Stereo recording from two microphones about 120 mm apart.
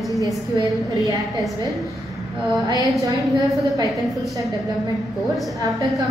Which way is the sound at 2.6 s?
30° right (ahead or behind).